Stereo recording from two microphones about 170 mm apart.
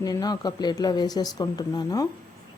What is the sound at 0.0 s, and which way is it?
Speech, 20° left (ahead or behind).